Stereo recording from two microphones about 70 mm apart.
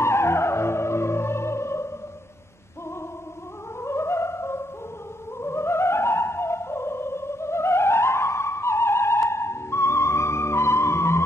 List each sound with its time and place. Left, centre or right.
0.0 s music: left
3.8 s music: left